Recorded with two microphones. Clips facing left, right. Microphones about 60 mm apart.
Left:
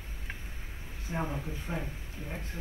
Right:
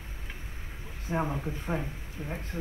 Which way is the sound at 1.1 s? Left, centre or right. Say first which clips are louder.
Right 4 dB; right.